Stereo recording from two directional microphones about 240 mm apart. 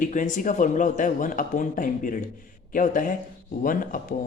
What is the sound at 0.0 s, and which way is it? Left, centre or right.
A man's voice, left.